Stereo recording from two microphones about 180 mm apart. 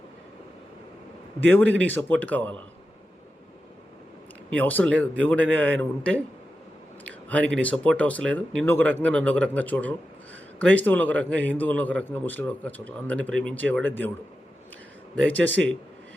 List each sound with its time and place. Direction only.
1.6 s speech: 90° right
1.9 s a man's voice: 10° left (ahead or behind)
4.5 s a man's voice: 10° left (ahead or behind)
7.3 s a man's voice: 5° left (ahead or behind)
15.1 s a man's voice: 5° left (ahead or behind)